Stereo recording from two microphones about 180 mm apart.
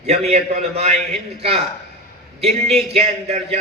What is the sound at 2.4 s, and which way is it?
A man's voice, 35° right (ahead or behind).